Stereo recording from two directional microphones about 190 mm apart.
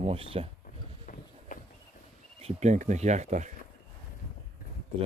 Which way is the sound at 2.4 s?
35° right (ahead or behind).